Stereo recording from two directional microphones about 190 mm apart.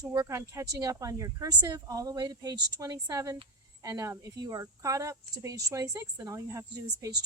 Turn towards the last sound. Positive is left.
turn(degrees=-15)  # may be behind; listen again after turning